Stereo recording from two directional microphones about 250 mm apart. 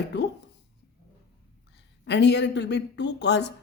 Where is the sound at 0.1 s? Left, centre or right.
Left.